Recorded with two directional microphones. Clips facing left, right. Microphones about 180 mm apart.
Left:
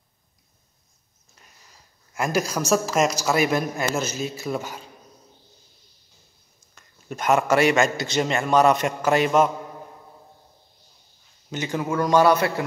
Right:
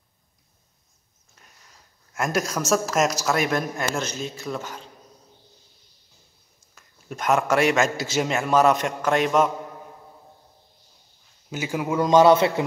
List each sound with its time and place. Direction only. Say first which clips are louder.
1.7 s speech: even; centre (ahead or behind)
6.7 s speech: left 2 dB; centre (ahead or behind)
11.5 s a man's voice: even; 10° right (ahead or behind)